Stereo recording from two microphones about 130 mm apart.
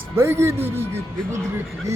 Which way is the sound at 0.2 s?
20° right (ahead or behind).